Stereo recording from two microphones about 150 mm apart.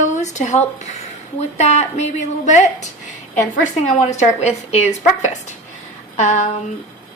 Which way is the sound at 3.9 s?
50° left (ahead or behind).